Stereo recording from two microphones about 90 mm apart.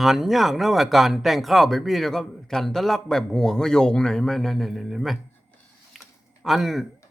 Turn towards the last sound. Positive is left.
turn(degrees=0)  # may be behind; listen again after turning